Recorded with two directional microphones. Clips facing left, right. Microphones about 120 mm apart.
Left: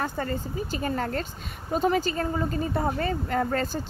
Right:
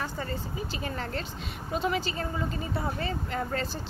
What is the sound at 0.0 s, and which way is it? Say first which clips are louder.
Speech: left 5 dB; 50° left (ahead or behind).